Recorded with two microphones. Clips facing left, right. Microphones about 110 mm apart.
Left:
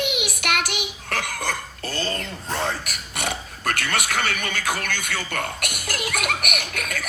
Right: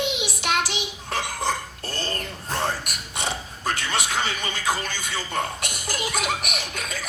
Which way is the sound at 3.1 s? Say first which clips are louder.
Left 1 dB; 70° left (ahead or behind).